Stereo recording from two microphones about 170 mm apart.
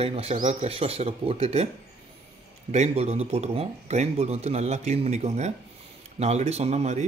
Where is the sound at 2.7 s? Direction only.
40° right (ahead or behind).